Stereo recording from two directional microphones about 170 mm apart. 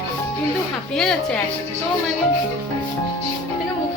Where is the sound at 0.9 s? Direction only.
5° left (ahead or behind).